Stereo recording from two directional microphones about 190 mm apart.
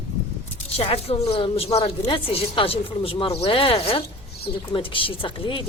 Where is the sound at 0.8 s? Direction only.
30° left (ahead or behind).